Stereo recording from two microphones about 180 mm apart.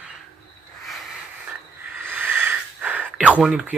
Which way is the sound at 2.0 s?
10° right (ahead or behind).